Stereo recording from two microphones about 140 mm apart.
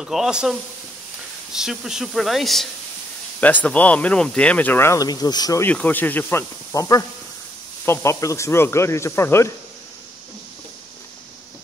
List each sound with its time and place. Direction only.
0.0 s speech: 5° right (ahead or behind); by 5.6 s 30° left (ahead or behind)
5.6 s speech: 10° left (ahead or behind)